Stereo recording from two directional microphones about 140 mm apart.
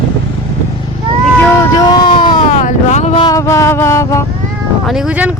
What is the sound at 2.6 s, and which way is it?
Speech, 55° left (ahead or behind).